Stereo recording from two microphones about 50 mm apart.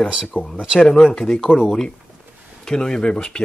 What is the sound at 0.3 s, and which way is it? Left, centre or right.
Speech, left.